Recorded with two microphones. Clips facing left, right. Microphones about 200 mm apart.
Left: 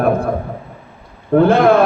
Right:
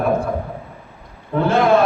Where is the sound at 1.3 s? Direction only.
55° left (ahead or behind).